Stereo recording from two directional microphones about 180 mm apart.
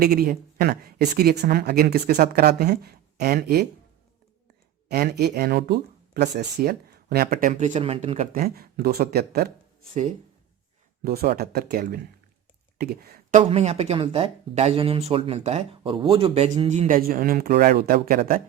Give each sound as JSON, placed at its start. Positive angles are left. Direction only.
{"t": 0.0, "sound": "speech", "side_deg": -55}
{"t": 4.9, "sound": "speech", "side_deg": -60}
{"t": 7.3, "sound": "speech", "side_deg": -45}
{"t": 8.3, "sound": "speech", "side_deg": -55}
{"t": 9.9, "sound": "speech", "side_deg": -40}
{"t": 11.0, "sound": "speech", "side_deg": -55}
{"t": 13.4, "sound": "speech", "side_deg": -30}
{"t": 17.0, "sound": "speech", "side_deg": -55}